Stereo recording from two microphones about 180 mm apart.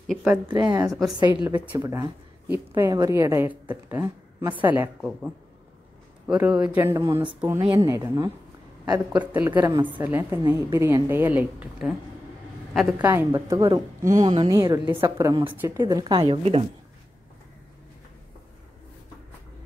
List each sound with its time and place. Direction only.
0.0 s speech: centre (ahead or behind)
0.5 s a woman's voice: 25° right (ahead or behind)
13.0 s a woman's voice: 10° right (ahead or behind)
15.8 s a woman's voice: 20° right (ahead or behind)